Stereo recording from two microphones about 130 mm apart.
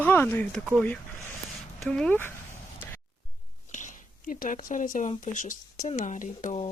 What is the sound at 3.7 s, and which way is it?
Speech, 70° left (ahead or behind).